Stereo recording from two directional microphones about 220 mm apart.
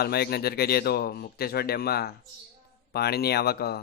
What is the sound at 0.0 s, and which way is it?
Speech, 45° left (ahead or behind).